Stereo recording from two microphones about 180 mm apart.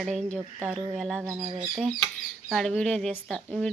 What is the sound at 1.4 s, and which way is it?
Speech, 30° right (ahead or behind).